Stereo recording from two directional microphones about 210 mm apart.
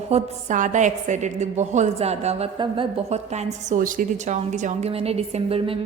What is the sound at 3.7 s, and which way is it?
Speech, 40° right (ahead or behind).